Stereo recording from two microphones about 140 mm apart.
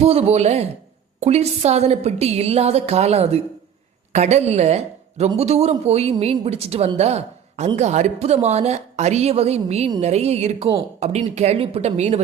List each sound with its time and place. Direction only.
0.0 s a woman's voice: 45° right (ahead or behind)